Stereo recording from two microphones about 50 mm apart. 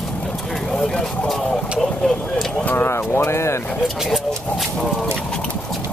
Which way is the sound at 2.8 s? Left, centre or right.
Left.